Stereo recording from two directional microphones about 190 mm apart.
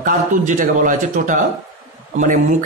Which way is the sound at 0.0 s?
45° right (ahead or behind).